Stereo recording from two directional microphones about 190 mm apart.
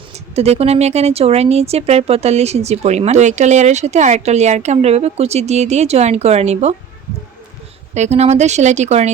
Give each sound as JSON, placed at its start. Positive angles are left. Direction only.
{"t": 0.3, "sound": "speech", "side_deg": -35}
{"t": 7.9, "sound": "speech", "side_deg": -35}